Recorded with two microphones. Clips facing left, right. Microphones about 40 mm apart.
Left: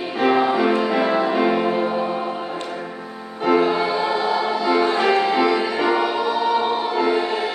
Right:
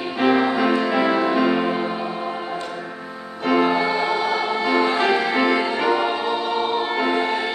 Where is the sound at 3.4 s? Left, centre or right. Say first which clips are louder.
Left 1 dB; centre.